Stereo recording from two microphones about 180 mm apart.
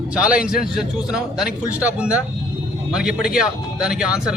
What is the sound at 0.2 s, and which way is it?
A man's voice, 5° right (ahead or behind).